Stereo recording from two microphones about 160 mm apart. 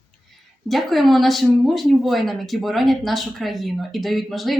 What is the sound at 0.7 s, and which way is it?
Speech, centre (ahead or behind).